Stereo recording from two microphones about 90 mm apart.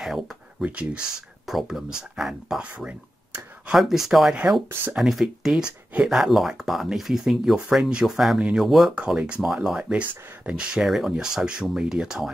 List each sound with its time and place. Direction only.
0.0 s a sound: 5° right (ahead or behind)
0.7 s speech: 10° right (ahead or behind)
1.4 s speech: centre (ahead or behind)
3.7 s speech: 5° right (ahead or behind)